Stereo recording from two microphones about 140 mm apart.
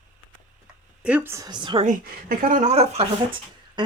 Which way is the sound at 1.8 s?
85° right.